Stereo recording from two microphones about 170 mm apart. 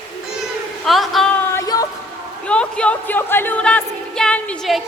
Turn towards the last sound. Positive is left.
turn(degrees=0)  # may be behind; listen again after turning